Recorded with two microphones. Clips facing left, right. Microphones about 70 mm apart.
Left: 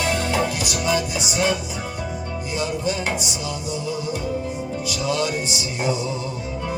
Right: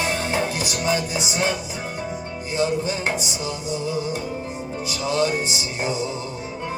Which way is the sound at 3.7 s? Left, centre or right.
Right.